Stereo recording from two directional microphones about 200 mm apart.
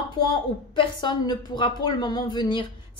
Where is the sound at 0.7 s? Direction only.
25° left (ahead or behind).